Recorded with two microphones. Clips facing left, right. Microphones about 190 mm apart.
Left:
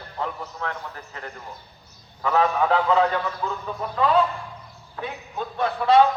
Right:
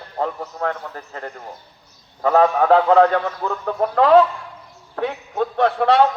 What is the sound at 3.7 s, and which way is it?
A man's voice, 75° right (ahead or behind).